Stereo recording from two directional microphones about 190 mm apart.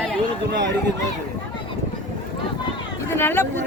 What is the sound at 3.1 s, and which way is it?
Speech, 10° left (ahead or behind).